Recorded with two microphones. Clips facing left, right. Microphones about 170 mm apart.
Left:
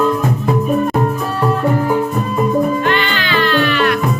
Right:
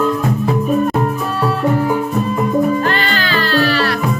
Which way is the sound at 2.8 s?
40° right (ahead or behind).